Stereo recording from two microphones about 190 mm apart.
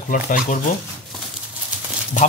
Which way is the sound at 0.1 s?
45° left (ahead or behind).